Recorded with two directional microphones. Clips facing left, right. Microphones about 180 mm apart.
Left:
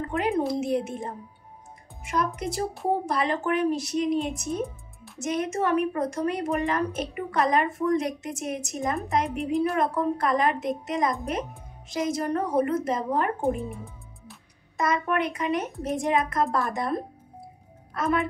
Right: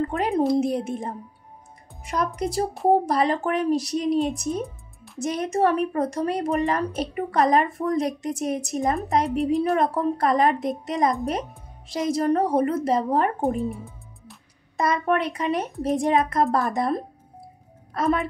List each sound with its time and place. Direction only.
0.1 s a sound: 35° right (ahead or behind)
0.6 s a woman's voice: 35° right (ahead or behind)
13.6 s speech: centre (ahead or behind)
14.8 s a woman's voice: 35° right (ahead or behind)
17.9 s a woman's voice: 35° right (ahead or behind)